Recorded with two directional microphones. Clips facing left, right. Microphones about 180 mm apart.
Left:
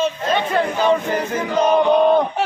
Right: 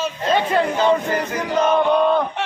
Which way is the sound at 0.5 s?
15° left (ahead or behind).